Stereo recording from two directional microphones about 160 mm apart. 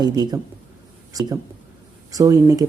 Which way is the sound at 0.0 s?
25° right (ahead or behind).